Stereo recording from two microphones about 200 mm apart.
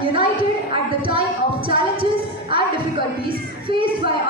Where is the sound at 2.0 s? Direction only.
25° right (ahead or behind).